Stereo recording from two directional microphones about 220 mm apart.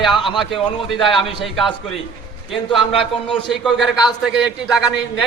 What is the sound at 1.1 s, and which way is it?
Speech, 25° left (ahead or behind).